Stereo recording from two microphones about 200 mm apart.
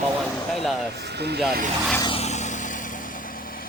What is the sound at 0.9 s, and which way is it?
Speech, 55° right (ahead or behind).